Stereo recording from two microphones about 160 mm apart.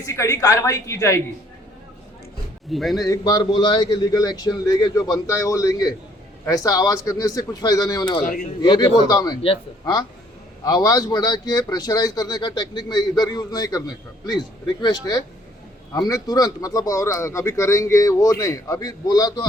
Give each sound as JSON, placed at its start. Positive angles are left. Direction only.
{"t": 0.0, "sound": "speech", "side_deg": 20}
{"t": 2.7, "sound": "speech", "side_deg": 0}
{"t": 3.0, "sound": "speech", "side_deg": 25}
{"t": 8.2, "sound": "speech", "side_deg": 60}
{"t": 8.6, "sound": "speech", "side_deg": 25}